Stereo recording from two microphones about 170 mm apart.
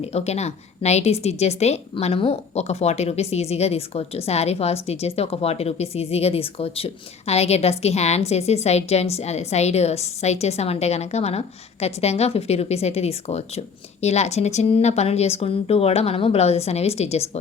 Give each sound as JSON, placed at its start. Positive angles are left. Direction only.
{"t": 0.0, "sound": "a woman's voice", "side_deg": 40}